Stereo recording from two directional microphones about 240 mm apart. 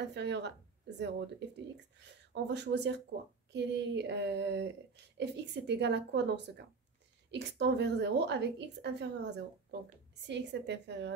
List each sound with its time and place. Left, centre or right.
0.0 s speech: right
2.3 s speech: right